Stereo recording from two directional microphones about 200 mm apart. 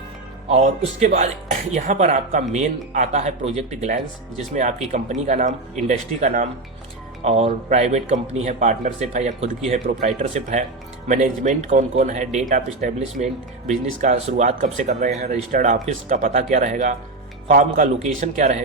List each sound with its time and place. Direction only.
0.5 s a man's voice: 35° right (ahead or behind)